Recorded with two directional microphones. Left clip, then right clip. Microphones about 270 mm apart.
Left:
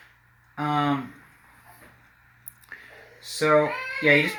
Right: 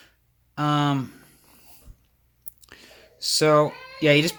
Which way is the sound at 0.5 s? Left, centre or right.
Right.